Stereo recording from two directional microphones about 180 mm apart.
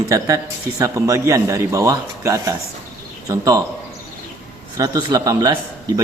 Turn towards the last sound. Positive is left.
turn(degrees=-20)  # may be behind; listen again after turning